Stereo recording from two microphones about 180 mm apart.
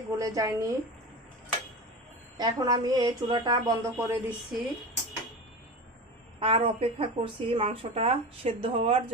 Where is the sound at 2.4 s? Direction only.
20° right (ahead or behind).